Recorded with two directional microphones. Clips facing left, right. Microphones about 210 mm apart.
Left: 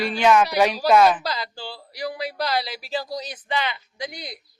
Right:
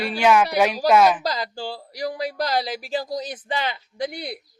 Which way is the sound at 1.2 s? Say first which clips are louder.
Right 3 dB; 45° right (ahead or behind).